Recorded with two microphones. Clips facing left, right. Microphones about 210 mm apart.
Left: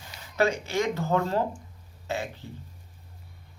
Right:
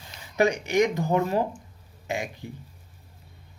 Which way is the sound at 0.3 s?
15° right (ahead or behind).